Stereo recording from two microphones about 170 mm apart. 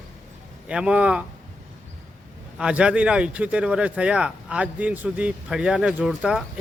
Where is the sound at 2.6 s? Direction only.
5° right (ahead or behind).